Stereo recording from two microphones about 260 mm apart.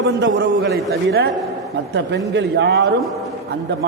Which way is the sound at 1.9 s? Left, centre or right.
Right.